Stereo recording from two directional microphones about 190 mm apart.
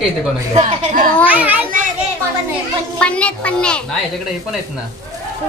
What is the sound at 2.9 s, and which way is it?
Speech, 5° left (ahead or behind).